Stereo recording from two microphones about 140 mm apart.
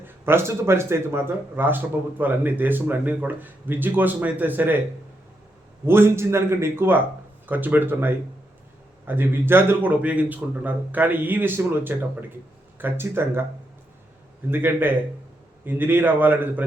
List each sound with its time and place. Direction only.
0.0 s speech: 15° right (ahead or behind)
5.8 s speech: 15° right (ahead or behind)
14.5 s speech: 15° right (ahead or behind)